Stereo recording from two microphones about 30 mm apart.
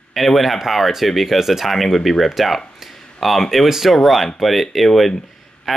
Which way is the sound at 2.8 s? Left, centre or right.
Centre.